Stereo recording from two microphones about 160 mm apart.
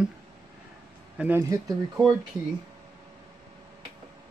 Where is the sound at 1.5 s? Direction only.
20° right (ahead or behind).